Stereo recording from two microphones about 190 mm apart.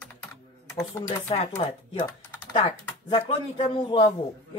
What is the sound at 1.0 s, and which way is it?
Speech, 35° left (ahead or behind).